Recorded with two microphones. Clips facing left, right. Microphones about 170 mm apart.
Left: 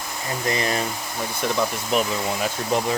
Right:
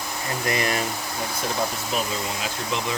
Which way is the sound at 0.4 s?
30° left (ahead or behind).